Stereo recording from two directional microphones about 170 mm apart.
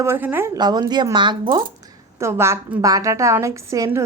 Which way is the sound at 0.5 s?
25° right (ahead or behind).